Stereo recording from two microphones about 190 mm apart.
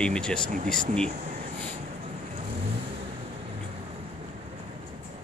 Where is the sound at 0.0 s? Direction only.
5° left (ahead or behind).